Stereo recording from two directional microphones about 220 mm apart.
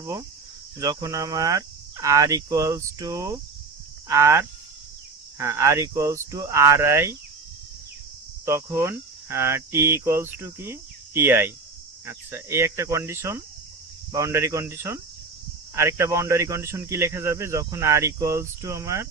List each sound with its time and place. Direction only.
0.0 s speech: 15° right (ahead or behind)
8.4 s speech: 10° right (ahead or behind)